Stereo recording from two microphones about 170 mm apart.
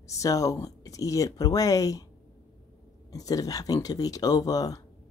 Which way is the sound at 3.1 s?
20° left (ahead or behind).